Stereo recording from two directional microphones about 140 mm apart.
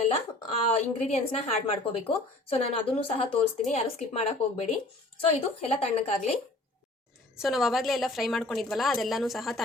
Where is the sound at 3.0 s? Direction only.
40° left (ahead or behind).